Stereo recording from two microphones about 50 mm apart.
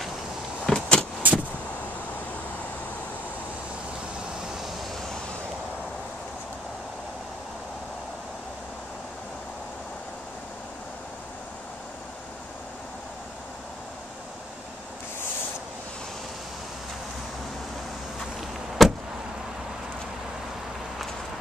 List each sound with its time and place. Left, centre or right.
0.7 s vehicle: centre
1.2 s vehicle: right
18.8 s vehicle: centre